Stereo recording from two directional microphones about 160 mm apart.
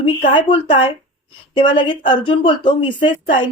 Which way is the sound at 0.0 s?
35° left (ahead or behind).